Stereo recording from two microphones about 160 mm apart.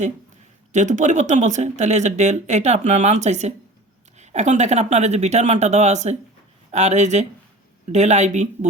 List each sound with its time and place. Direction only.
0.7 s speech: 50° right (ahead or behind)